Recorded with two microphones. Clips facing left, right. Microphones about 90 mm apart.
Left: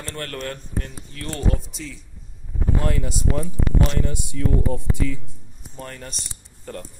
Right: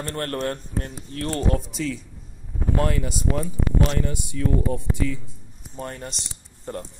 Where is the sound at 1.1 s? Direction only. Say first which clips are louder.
Right 5 dB; 45° right (ahead or behind).